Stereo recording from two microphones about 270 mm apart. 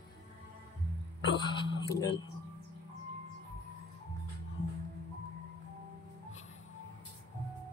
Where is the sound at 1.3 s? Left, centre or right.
Centre.